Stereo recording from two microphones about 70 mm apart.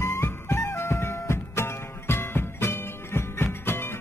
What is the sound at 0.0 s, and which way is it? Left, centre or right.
Music, left.